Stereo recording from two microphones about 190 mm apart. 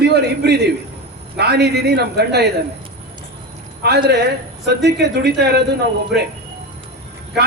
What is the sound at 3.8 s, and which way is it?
A man's voice, 60° right (ahead or behind).